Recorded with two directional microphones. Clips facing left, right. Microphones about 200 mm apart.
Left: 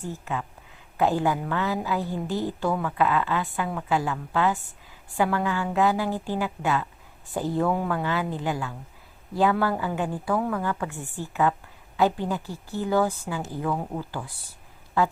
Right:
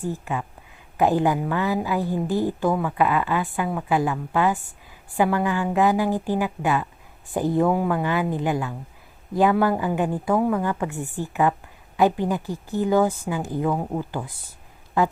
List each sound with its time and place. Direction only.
0.0 s a woman's voice: 15° right (ahead or behind)